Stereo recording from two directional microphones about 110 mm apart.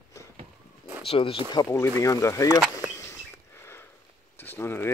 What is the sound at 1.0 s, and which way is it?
Speech, 60° left (ahead or behind).